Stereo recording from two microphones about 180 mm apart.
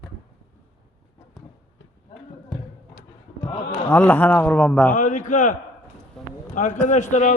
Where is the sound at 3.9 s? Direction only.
10° left (ahead or behind).